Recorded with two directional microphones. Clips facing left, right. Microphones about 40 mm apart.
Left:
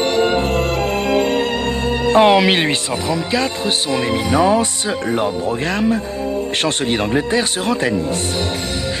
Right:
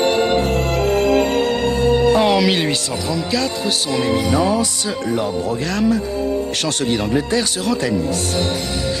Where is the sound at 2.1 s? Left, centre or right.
Left.